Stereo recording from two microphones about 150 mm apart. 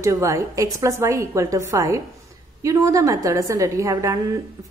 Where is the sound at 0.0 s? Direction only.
20° right (ahead or behind).